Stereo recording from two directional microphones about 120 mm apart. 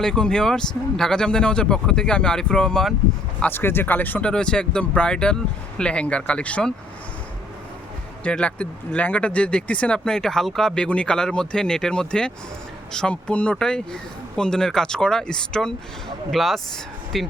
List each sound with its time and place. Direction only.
0.0 s speech: 5° left (ahead or behind)
3.4 s speech: 15° left (ahead or behind)
8.2 s speech: 10° left (ahead or behind)